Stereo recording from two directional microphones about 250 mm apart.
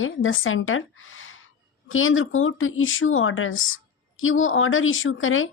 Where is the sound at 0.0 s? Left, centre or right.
Left.